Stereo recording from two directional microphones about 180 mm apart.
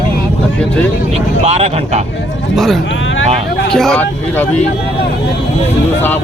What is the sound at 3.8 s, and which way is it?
Speech, 5° left (ahead or behind).